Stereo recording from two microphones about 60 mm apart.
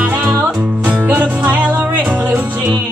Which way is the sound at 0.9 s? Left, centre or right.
Right.